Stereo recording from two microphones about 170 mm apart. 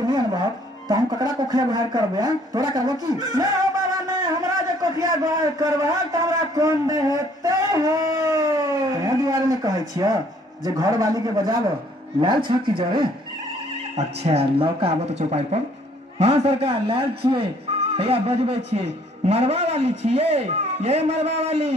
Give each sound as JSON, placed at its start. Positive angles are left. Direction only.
{"t": 0.8, "sound": "a man's voice", "side_deg": -20}